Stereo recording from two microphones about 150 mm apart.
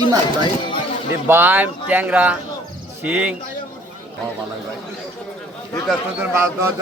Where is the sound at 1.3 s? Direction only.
15° right (ahead or behind).